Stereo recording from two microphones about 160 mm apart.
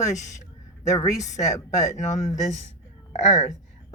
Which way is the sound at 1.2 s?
50° left (ahead or behind).